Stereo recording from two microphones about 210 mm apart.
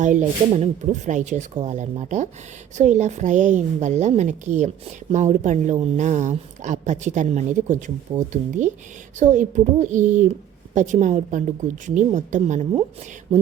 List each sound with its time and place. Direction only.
0.0 s a woman's voice: 35° right (ahead or behind)